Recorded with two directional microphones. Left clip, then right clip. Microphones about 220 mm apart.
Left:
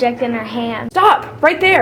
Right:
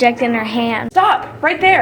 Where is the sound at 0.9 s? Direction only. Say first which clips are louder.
Left 2 dB; 45° left (ahead or behind).